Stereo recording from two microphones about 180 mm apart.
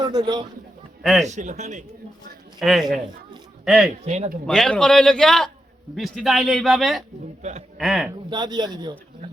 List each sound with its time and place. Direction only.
0.0 s speech: 25° right (ahead or behind)
1.3 s a man's voice: 40° right (ahead or behind)
2.6 s a man's voice: centre (ahead or behind)
4.0 s a man's voice: 40° right (ahead or behind)
4.4 s a man's voice: 5° left (ahead or behind)
8.3 s speech: 25° right (ahead or behind)